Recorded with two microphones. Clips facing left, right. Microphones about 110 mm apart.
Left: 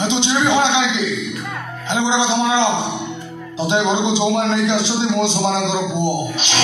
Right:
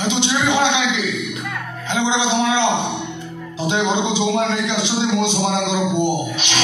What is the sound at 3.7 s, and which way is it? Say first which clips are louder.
A man's voice: left 2 dB; 20° left (ahead or behind).